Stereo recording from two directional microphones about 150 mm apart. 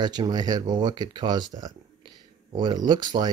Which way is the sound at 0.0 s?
30° right (ahead or behind).